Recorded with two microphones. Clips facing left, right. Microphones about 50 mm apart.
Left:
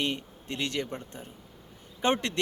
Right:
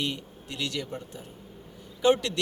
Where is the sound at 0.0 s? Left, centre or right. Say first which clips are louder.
Left 1 dB; left.